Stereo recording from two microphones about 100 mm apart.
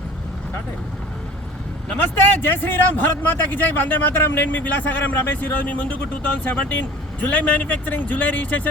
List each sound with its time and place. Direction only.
1.9 s speech: 20° left (ahead or behind)